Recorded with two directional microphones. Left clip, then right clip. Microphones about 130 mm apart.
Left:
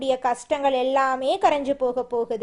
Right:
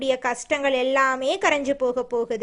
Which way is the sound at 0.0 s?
15° right (ahead or behind).